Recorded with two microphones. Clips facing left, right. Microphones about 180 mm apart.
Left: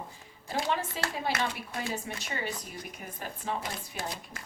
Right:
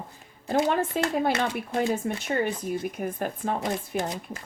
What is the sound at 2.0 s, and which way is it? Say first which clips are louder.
A woman's voice: right 10 dB; 50° right (ahead or behind).